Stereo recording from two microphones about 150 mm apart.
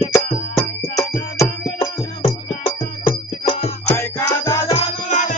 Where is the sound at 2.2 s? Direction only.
35° left (ahead or behind).